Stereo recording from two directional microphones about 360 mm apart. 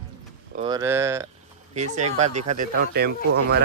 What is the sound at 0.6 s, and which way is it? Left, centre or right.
Speech, centre.